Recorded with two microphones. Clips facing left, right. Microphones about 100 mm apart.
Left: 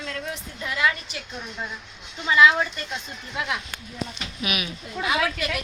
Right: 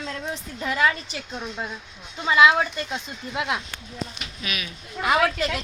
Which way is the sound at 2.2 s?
15° right (ahead or behind).